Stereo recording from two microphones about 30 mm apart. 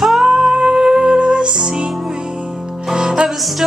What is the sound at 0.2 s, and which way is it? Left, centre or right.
Music, right.